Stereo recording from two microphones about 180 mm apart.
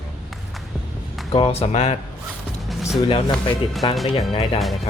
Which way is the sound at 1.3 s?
30° left (ahead or behind).